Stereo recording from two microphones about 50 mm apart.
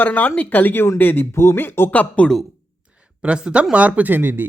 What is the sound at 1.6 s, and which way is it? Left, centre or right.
Speech, left.